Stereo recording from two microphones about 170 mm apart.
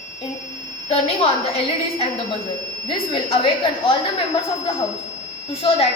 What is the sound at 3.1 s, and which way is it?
Speech, 30° left (ahead or behind).